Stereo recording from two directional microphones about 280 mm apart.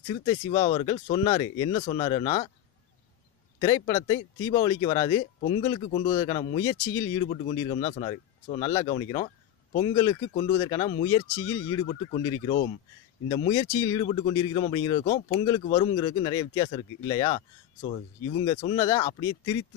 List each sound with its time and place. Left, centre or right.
0.3 s speech: centre
3.6 s speech: centre